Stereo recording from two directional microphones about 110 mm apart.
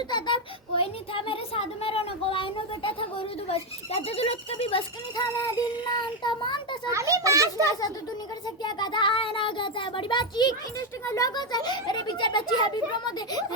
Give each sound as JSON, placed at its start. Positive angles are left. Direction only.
{"t": 0.1, "sound": "a child's voice", "side_deg": 45}
{"t": 5.1, "sound": "a child's voice", "side_deg": 35}
{"t": 6.9, "sound": "a child's voice", "side_deg": -30}
{"t": 8.6, "sound": "a child's voice", "side_deg": 45}